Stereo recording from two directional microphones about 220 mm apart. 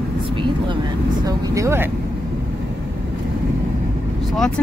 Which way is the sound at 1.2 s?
15° right (ahead or behind).